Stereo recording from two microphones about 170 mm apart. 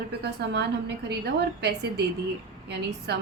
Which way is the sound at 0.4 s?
80° right.